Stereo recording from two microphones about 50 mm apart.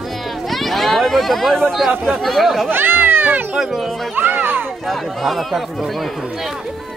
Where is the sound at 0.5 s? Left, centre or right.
Centre.